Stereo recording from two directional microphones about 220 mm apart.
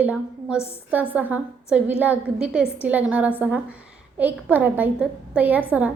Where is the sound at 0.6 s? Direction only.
10° left (ahead or behind).